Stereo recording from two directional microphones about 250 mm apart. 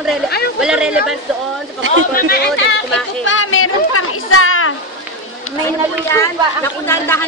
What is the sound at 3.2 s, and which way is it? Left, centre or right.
Children playing, left.